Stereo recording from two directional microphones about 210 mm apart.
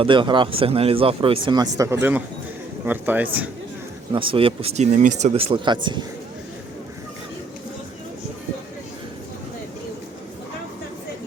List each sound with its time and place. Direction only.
0.0 s speech: 25° right (ahead or behind)
4.1 s speech: 25° right (ahead or behind)